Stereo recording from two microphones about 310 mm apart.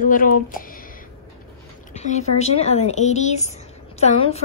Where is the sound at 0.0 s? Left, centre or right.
Left.